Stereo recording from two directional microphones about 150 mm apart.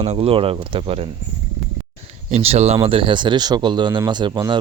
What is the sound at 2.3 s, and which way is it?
Speech, 45° right (ahead or behind).